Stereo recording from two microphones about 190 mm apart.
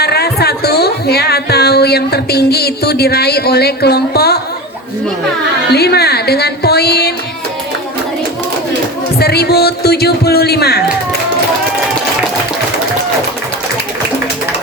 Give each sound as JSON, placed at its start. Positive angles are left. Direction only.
{"t": 0.0, "sound": "speech", "side_deg": 55}
{"t": 5.7, "sound": "a sound", "side_deg": 55}
{"t": 9.1, "sound": "speech", "side_deg": 55}